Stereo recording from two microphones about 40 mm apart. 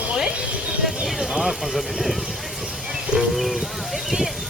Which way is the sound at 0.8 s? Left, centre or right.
Centre.